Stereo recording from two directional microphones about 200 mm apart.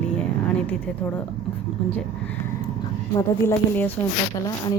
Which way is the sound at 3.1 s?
10° left (ahead or behind).